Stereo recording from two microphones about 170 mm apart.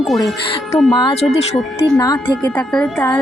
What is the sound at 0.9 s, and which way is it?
A woman's voice, 25° left (ahead or behind).